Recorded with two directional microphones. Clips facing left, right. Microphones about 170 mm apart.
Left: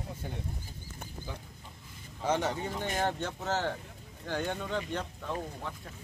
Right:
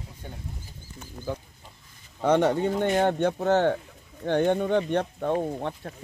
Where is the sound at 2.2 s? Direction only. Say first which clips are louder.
Right 9 dB; 60° right (ahead or behind).